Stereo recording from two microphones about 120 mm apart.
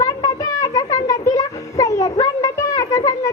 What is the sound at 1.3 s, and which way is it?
Music, 30° left (ahead or behind).